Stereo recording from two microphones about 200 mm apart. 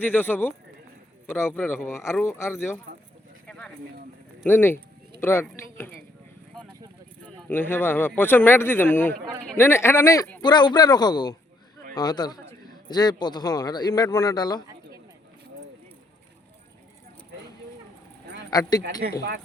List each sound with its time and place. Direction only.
0.0 s speech: 10° left (ahead or behind)
3.4 s a sound: 5° left (ahead or behind)
4.4 s speech: 10° left (ahead or behind)
7.5 s a man's voice: 10° left (ahead or behind)
18.5 s a man's voice: 20° left (ahead or behind)
19.0 s speech: 50° right (ahead or behind)